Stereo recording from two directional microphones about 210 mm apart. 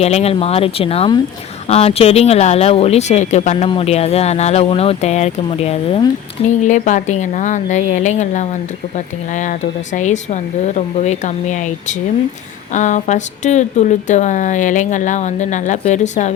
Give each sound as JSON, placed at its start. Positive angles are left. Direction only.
{"t": 0.0, "sound": "speech", "side_deg": 30}